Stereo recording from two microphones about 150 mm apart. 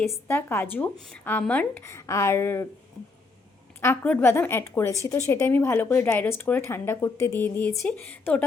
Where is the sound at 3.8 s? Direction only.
15° left (ahead or behind).